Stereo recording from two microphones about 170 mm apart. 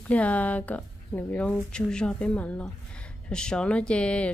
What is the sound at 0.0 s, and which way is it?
Speech, 10° left (ahead or behind).